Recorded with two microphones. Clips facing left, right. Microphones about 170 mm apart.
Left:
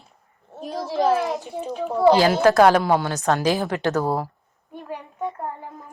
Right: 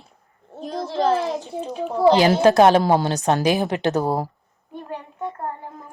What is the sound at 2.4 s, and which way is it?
A woman's voice, 20° right (ahead or behind).